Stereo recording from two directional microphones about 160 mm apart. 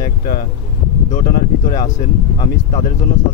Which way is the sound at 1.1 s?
55° left (ahead or behind).